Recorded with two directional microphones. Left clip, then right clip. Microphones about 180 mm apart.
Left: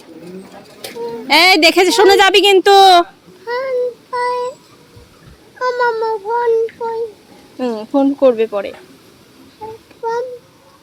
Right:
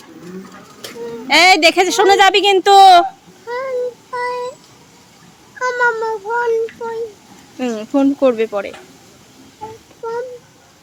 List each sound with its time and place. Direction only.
1.3 s a woman's voice: 15° left (ahead or behind)
3.5 s child singing: 50° left (ahead or behind)
5.5 s cat: 10° left (ahead or behind)
7.6 s speech: centre (ahead or behind)